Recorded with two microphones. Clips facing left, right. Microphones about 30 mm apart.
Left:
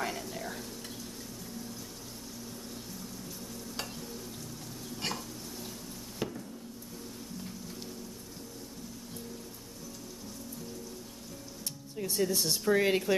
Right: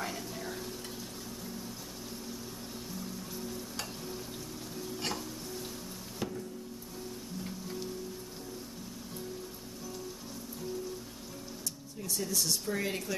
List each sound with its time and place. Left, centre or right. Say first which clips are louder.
0.0 s whispering: left 2 dB; centre
6.1 s a sound: left 1 dB; centre
12.0 s speech: left 4 dB; left